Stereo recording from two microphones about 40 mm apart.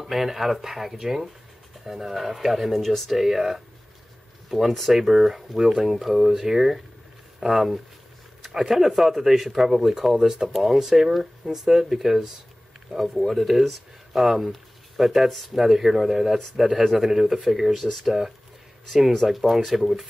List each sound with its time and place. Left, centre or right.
0.0 s speech: centre
3.2 s speech: centre
10.5 s speech: centre
13.3 s speech: centre